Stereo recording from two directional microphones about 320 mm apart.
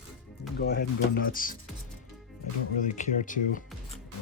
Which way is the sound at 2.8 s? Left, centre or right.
Left.